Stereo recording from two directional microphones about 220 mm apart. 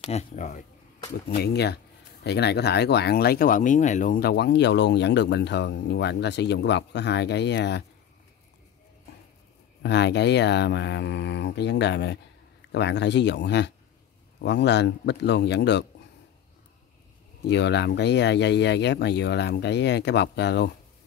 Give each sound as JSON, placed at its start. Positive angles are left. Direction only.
{"t": 0.0, "sound": "speech", "side_deg": 30}
{"t": 1.3, "sound": "speech", "side_deg": 50}
{"t": 9.8, "sound": "speech", "side_deg": 50}
{"t": 17.5, "sound": "speech", "side_deg": 50}